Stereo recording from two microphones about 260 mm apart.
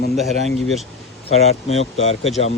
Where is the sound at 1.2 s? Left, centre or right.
Left.